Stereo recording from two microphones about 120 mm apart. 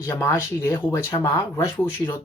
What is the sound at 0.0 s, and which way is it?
Speech, 25° left (ahead or behind).